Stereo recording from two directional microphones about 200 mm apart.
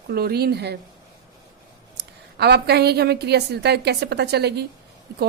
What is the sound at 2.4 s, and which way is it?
A woman's voice, 55° right (ahead or behind).